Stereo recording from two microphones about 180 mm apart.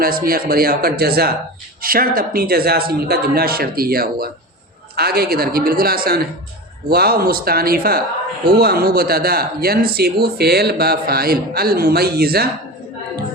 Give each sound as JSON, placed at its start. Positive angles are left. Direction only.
{"t": 0.0, "sound": "speech", "side_deg": -55}